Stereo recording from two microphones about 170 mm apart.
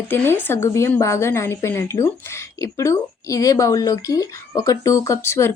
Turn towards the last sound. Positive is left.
turn(degrees=15)  # may be behind; listen again after turning